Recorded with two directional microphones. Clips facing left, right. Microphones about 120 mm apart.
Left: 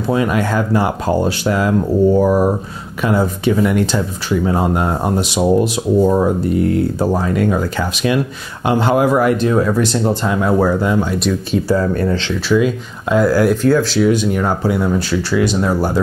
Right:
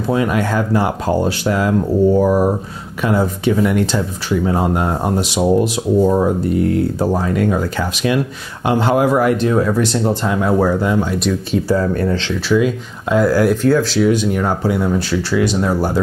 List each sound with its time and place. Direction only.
0.1 s speech: 15° left (ahead or behind)